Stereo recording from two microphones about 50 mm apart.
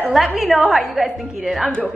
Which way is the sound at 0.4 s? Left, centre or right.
Centre.